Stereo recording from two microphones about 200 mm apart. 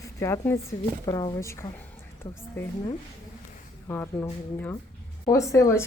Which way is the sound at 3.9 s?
10° left (ahead or behind).